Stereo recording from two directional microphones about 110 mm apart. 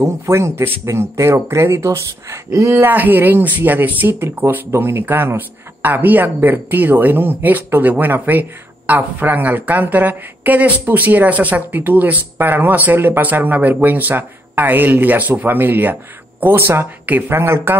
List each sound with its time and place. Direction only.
0.0 s a man's voice: 25° right (ahead or behind)